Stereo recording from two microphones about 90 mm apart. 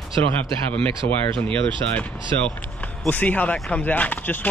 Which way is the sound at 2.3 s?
15° left (ahead or behind).